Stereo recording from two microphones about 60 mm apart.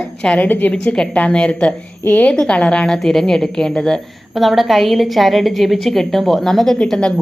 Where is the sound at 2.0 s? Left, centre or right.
Left.